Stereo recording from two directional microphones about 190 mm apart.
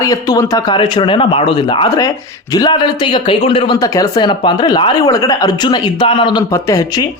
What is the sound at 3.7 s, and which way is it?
Speech, 20° left (ahead or behind).